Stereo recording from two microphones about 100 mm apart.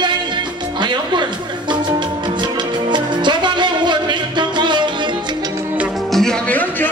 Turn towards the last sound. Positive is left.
turn(degrees=15)  # may be behind; listen again after turning